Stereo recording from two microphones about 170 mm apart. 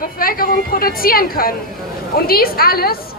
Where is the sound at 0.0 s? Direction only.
55° left (ahead or behind).